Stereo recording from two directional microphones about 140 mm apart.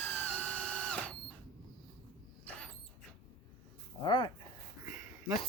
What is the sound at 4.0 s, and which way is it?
Speech, 35° left (ahead or behind).